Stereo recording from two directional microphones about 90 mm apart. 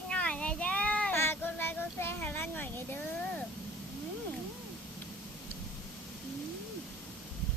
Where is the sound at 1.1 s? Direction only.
25° left (ahead or behind).